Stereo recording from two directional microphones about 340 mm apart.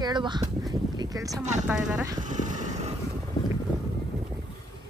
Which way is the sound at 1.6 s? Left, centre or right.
Centre.